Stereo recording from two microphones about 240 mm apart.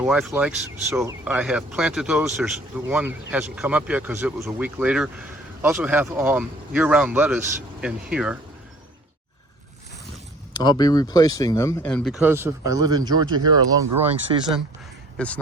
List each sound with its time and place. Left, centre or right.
0.0 s speech: centre
10.6 s speech: centre
15.2 s speech: centre